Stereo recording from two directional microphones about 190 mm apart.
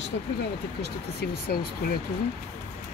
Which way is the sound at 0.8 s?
55° left (ahead or behind).